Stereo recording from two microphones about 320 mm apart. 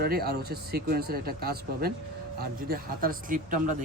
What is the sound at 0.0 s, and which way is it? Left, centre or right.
Speech, right.